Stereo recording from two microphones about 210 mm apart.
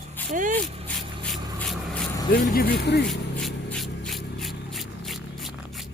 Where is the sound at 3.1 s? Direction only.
5° left (ahead or behind).